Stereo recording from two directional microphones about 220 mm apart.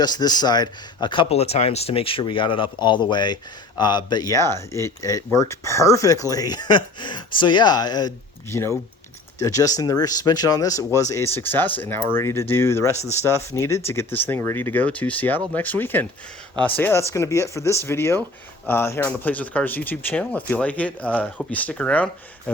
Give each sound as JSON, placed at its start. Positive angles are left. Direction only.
{"t": 0.0, "sound": "speech", "side_deg": 20}